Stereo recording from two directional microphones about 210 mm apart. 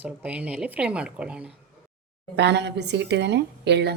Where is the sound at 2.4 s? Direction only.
55° right (ahead or behind).